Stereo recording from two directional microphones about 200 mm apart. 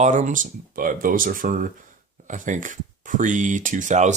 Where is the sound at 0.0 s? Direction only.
40° right (ahead or behind).